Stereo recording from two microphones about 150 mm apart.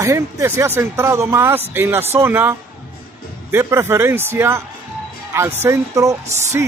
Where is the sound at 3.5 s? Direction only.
15° right (ahead or behind).